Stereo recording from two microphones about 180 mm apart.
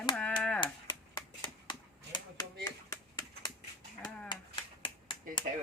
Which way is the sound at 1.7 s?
25° left (ahead or behind).